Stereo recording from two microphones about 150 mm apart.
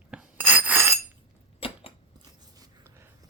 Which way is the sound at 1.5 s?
40° left (ahead or behind).